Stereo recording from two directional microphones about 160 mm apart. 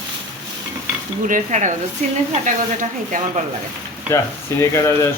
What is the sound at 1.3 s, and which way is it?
Speech, 50° right (ahead or behind).